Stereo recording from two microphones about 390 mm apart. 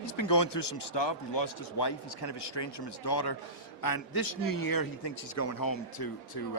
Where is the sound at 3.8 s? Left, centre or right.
Left.